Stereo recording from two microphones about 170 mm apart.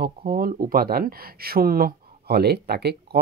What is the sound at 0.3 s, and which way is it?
Speech, 60° right (ahead or behind).